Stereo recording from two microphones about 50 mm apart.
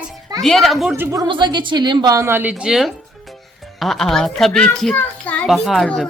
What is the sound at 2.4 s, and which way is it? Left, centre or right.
Speech, right.